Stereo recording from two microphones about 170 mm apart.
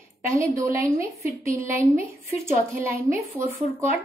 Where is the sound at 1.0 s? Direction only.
35° left (ahead or behind).